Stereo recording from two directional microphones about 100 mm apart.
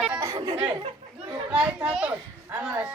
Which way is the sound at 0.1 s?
30° right (ahead or behind).